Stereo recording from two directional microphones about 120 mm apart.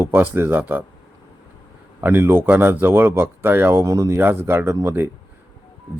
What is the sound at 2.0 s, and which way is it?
Speech, 20° right (ahead or behind).